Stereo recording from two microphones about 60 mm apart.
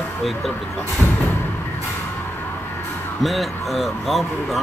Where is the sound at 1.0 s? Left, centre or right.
Left.